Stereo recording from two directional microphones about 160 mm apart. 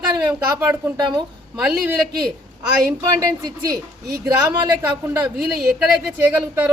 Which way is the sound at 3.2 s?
20° right (ahead or behind).